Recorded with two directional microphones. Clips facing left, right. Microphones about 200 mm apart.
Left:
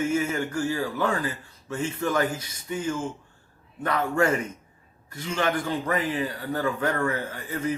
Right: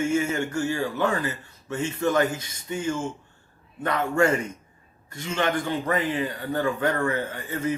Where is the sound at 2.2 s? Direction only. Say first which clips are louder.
Right 1 dB; 10° left (ahead or behind).